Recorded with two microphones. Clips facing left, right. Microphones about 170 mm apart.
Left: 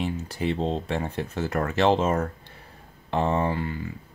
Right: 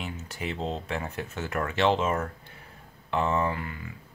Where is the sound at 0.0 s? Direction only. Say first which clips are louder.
Left 8 dB; 35° left (ahead or behind).